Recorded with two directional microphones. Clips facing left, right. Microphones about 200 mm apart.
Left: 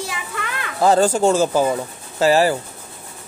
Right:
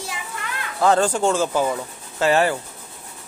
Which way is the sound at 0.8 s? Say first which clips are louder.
Left 3 dB; 35° left (ahead or behind).